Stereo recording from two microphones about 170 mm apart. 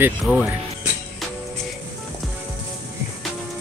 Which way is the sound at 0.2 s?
5° left (ahead or behind).